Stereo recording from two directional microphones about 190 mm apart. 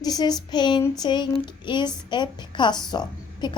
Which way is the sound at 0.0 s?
20° left (ahead or behind).